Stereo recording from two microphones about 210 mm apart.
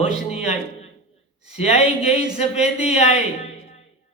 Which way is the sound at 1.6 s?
30° left (ahead or behind).